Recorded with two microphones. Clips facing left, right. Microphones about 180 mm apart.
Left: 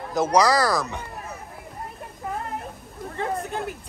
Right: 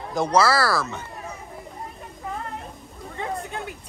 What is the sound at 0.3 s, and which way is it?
Speech, 15° left (ahead or behind).